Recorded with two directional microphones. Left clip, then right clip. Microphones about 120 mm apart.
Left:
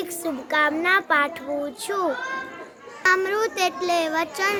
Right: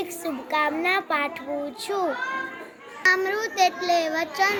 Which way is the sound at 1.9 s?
15° left (ahead or behind).